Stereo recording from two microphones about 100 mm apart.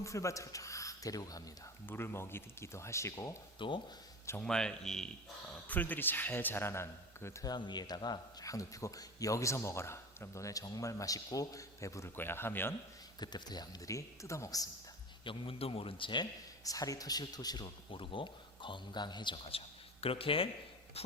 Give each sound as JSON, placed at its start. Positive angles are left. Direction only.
{"t": 0.0, "sound": "speech", "side_deg": 30}
{"t": 1.9, "sound": "a man's voice", "side_deg": 20}
{"t": 3.6, "sound": "a man's voice", "side_deg": 55}
{"t": 4.4, "sound": "speech", "side_deg": 5}
{"t": 5.6, "sound": "a man's voice", "side_deg": 15}
{"t": 7.4, "sound": "speech", "side_deg": 45}
{"t": 13.1, "sound": "speech", "side_deg": 45}
{"t": 15.2, "sound": "speech", "side_deg": 65}
{"t": 16.6, "sound": "speech", "side_deg": 35}
{"t": 17.9, "sound": "a man's voice", "side_deg": 60}